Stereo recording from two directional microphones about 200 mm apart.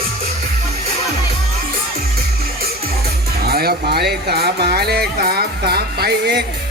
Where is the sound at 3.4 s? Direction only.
50° right (ahead or behind).